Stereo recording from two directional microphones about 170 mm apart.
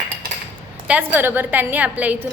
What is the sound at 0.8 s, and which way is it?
A woman's voice, 10° right (ahead or behind).